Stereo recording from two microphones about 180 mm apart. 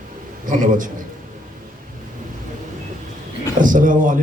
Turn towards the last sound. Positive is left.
turn(degrees=-45)  # may be behind; listen again after turning